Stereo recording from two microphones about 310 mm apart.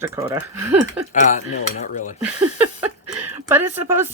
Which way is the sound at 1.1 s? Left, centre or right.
Left.